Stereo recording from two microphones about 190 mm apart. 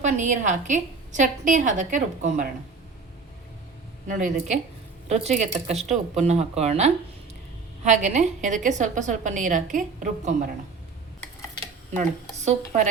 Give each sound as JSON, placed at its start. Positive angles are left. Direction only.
{"t": 0.0, "sound": "a woman's voice", "side_deg": -40}
{"t": 4.0, "sound": "a woman's voice", "side_deg": -40}
{"t": 12.5, "sound": "a woman's voice", "side_deg": -40}